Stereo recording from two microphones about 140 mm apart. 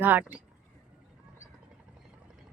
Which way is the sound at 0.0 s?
15° right (ahead or behind).